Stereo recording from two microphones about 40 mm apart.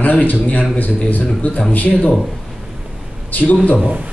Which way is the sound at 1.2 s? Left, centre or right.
Left.